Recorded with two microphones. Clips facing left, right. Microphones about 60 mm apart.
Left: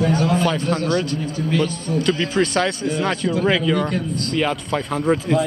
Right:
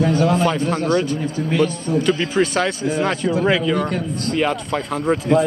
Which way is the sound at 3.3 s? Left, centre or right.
Right.